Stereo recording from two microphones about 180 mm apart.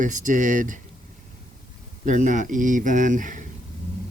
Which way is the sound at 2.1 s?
45° right (ahead or behind).